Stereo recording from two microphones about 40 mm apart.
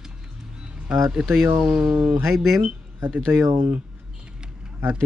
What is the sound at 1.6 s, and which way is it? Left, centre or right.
Speech, right.